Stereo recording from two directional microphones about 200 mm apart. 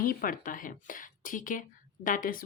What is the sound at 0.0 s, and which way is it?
Speech, 45° left (ahead or behind).